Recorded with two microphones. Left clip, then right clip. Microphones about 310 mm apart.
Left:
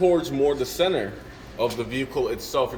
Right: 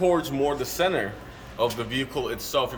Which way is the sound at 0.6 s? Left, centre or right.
Centre.